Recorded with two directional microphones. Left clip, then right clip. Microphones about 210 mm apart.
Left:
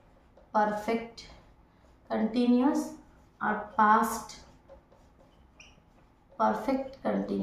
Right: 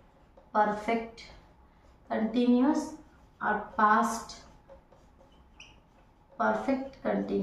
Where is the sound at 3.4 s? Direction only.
25° left (ahead or behind).